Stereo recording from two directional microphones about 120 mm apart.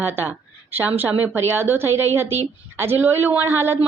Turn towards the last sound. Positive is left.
turn(degrees=-20)  # may be behind; listen again after turning